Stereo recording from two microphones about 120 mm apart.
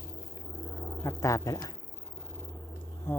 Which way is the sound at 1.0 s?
25° left (ahead or behind).